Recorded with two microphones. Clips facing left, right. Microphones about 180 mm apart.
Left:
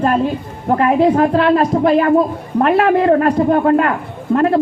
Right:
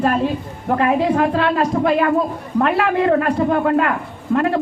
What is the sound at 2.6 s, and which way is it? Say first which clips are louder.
A man's voice: left 5 dB; 40° left (ahead or behind).